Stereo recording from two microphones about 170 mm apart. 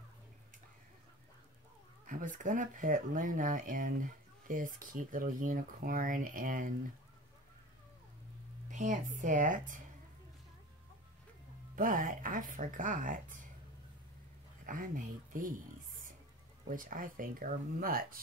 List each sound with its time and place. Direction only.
2.0 s speech: 50° right (ahead or behind)
8.6 s speech: 50° right (ahead or behind)
11.7 s speech: 55° right (ahead or behind)
14.7 s speech: 55° right (ahead or behind)
16.6 s speech: 50° right (ahead or behind)